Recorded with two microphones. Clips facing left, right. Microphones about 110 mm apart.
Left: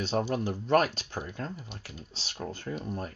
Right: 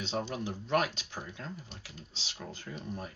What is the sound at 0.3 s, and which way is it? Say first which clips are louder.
Speech: left 7 dB; 50° left (ahead or behind).